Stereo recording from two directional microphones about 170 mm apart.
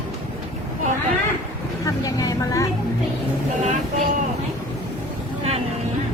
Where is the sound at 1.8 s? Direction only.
20° left (ahead or behind).